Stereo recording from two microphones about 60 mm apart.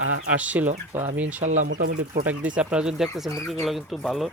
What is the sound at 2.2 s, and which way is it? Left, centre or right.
Speech, right.